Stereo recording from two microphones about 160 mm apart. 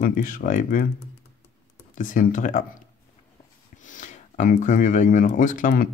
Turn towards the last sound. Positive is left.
turn(degrees=55)  # may be behind; listen again after turning